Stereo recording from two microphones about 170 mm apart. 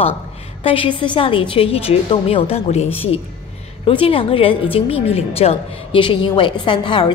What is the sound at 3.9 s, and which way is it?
A woman's voice, 30° left (ahead or behind).